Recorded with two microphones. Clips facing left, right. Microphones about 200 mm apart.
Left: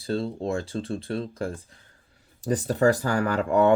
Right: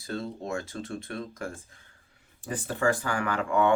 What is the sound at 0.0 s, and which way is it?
Speech, 30° left (ahead or behind).